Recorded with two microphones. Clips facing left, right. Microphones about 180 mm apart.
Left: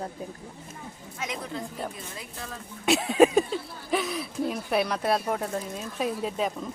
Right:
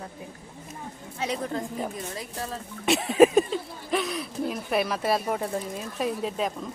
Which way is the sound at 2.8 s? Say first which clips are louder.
Right 1 dB; centre (ahead or behind).